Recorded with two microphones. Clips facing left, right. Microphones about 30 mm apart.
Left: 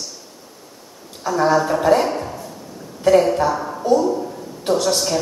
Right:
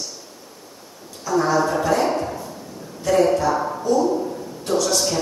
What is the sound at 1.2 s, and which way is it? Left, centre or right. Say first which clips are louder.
Speech: left 2 dB; left.